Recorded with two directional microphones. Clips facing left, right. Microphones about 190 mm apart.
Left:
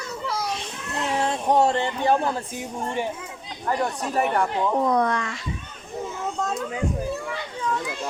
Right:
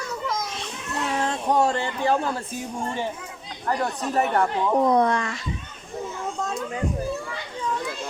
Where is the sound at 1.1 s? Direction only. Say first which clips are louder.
Left 2 dB; 20° left (ahead or behind).